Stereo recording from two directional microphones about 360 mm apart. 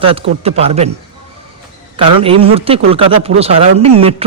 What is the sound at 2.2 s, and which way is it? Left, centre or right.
A man's voice, centre.